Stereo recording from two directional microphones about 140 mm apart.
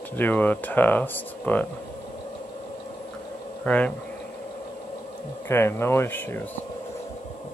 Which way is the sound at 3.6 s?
10° left (ahead or behind).